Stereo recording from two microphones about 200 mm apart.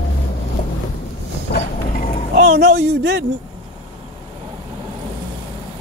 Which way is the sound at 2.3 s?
55° right (ahead or behind).